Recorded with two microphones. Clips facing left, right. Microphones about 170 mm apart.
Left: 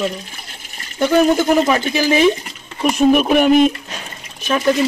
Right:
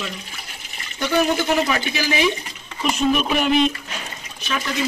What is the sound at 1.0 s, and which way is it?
Speech, 50° left (ahead or behind).